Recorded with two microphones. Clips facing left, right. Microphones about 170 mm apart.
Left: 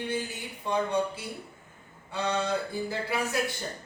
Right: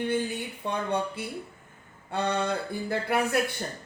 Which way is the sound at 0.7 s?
60° right (ahead or behind).